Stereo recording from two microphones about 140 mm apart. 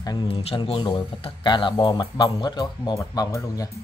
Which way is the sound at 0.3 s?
45° left (ahead or behind).